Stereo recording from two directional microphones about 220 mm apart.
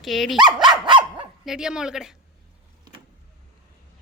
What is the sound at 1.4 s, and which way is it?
Speech, 5° right (ahead or behind).